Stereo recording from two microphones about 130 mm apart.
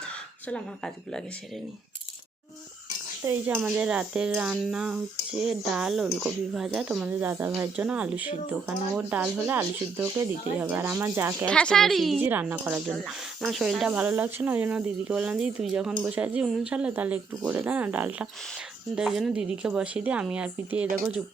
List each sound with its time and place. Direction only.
3.2 s speech: 15° right (ahead or behind)
11.4 s speech: 10° left (ahead or behind)
12.2 s speech: 15° right (ahead or behind)
12.9 s speech: centre (ahead or behind)